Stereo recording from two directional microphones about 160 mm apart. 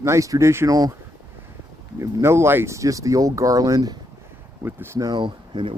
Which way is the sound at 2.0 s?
15° right (ahead or behind).